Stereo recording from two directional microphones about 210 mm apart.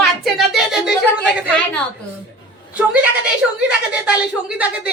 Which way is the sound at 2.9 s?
5° right (ahead or behind).